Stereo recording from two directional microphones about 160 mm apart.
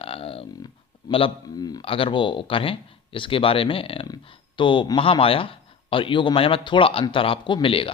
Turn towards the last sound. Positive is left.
turn(degrees=35)  # may be behind; listen again after turning